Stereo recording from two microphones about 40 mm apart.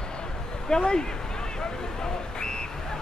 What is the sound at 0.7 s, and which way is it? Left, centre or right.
Speech, centre.